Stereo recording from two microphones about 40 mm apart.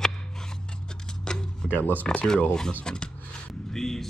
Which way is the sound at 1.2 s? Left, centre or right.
Centre.